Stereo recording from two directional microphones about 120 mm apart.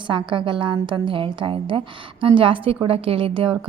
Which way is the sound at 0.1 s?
45° right (ahead or behind).